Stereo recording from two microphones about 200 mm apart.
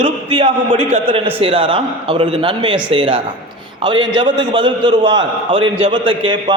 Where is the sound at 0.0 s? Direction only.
30° right (ahead or behind).